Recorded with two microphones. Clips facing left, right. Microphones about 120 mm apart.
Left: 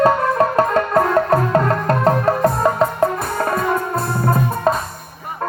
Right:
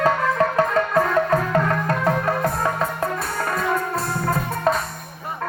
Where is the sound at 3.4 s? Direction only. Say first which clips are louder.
Left 5 dB; 40° left (ahead or behind).